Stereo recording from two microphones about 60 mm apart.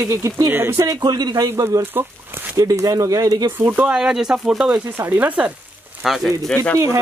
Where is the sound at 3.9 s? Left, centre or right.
Centre.